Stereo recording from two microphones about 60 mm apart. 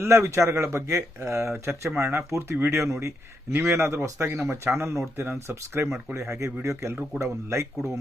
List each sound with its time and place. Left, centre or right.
0.0 s speech: right
1.5 s speech: right